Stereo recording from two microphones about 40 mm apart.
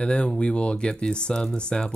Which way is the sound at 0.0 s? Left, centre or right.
Left.